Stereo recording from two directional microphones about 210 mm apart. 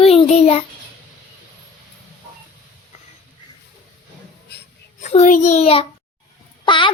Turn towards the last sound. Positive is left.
turn(degrees=25)  # may be behind; listen again after turning